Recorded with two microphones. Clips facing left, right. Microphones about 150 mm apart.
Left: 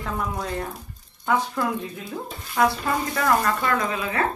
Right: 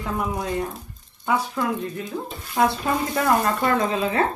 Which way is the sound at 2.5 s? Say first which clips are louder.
Right 1 dB; 25° right (ahead or behind).